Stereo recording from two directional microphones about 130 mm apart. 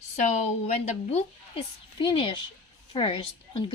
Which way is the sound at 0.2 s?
65° left (ahead or behind).